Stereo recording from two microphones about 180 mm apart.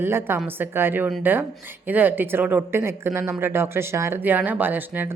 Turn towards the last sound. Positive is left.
turn(degrees=-10)  # may be behind; listen again after turning